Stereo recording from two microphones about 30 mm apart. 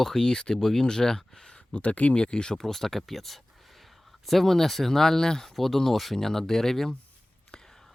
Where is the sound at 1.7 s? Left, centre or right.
Left.